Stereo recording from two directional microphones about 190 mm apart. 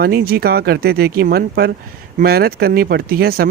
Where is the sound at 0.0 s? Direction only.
55° right (ahead or behind).